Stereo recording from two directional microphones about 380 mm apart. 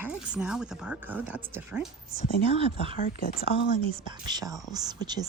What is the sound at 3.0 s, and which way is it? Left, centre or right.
Speech, left.